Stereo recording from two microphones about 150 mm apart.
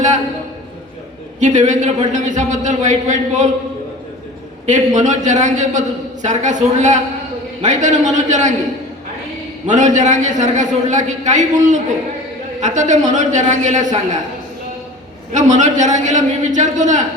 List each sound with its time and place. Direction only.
1.4 s a man's voice: 55° right (ahead or behind)
4.6 s a man's voice: 55° right (ahead or behind)
9.6 s a man's voice: 55° right (ahead or behind)
15.3 s a man's voice: 55° right (ahead or behind)